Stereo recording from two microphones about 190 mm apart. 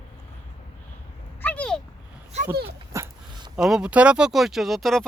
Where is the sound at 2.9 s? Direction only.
20° right (ahead or behind).